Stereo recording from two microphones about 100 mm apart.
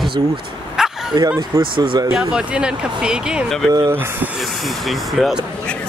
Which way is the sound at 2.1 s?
5° right (ahead or behind).